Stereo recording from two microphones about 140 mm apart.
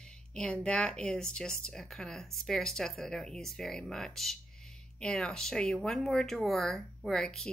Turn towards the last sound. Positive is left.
turn(degrees=5)  # may be behind; listen again after turning